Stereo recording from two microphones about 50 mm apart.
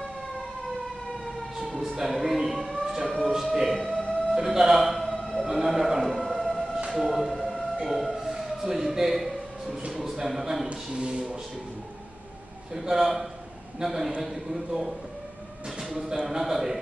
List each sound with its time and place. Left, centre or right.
1.6 s a sound: centre
4.3 s a man's voice: centre
5.0 s music: centre
6.9 s speech: centre
7.3 s siren: centre
7.8 s speech: centre
9.7 s speech: centre
10.7 s speech: centre
12.7 s a man's voice: centre